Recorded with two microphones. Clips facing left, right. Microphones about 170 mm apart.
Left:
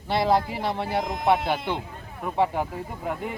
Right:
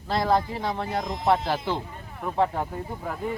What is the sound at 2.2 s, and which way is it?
Speech, 5° left (ahead or behind).